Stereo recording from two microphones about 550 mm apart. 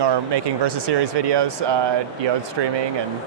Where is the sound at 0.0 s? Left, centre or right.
Right.